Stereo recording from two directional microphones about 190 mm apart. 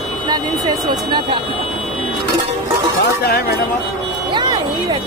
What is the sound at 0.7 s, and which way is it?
Speech, centre (ahead or behind).